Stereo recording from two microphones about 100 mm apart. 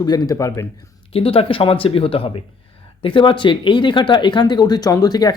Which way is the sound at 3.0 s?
60° left (ahead or behind).